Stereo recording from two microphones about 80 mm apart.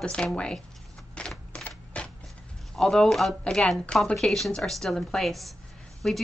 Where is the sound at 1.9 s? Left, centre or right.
Centre.